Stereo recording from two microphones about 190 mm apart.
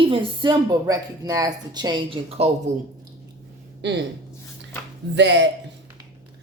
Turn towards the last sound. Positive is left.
turn(degrees=-65)  # may be behind; listen again after turning